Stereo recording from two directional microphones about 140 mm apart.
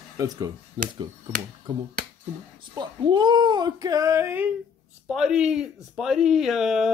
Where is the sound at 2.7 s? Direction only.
30° right (ahead or behind).